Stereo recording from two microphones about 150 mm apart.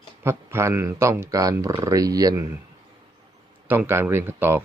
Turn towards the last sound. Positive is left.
turn(degrees=-15)  # may be behind; listen again after turning